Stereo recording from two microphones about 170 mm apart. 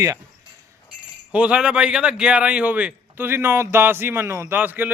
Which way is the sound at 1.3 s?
5° right (ahead or behind).